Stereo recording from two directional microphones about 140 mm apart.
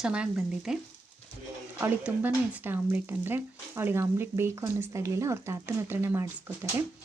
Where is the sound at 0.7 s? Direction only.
5° right (ahead or behind).